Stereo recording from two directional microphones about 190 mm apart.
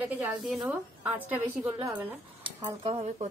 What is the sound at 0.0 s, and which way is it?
A woman's voice, 10° right (ahead or behind).